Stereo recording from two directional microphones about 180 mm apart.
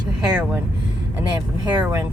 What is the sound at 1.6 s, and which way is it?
Speech, 20° right (ahead or behind).